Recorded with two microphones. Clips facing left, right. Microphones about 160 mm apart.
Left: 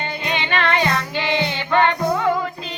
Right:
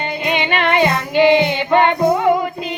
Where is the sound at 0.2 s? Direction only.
15° right (ahead or behind).